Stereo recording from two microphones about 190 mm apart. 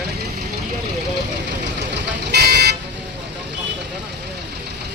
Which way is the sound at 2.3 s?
60° right (ahead or behind).